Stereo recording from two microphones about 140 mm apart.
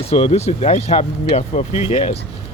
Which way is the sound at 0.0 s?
45° left (ahead or behind).